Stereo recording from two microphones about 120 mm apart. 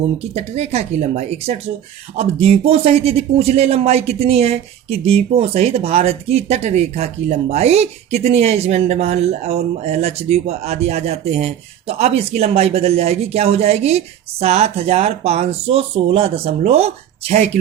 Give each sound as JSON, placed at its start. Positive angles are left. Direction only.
{"t": 0.0, "sound": "speech", "side_deg": -60}